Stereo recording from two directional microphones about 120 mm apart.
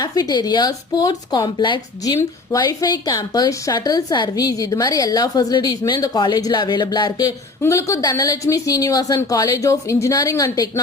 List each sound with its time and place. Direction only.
0.0 s a woman's voice: 35° left (ahead or behind)
2.1 s a woman's voice: 30° left (ahead or behind)
7.6 s a woman's voice: 25° left (ahead or behind)